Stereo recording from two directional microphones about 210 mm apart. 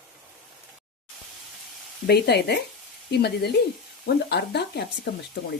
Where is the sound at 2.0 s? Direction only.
50° left (ahead or behind).